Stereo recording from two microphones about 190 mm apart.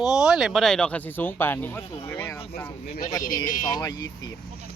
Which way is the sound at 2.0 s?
10° left (ahead or behind).